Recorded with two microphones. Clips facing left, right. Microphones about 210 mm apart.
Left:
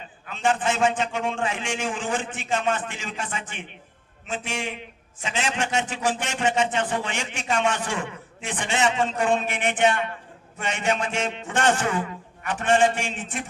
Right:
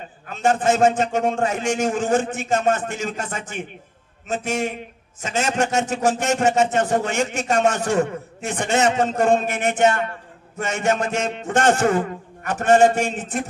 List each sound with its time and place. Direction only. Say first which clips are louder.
0.0 s a man's voice: right 4 dB; 45° right (ahead or behind)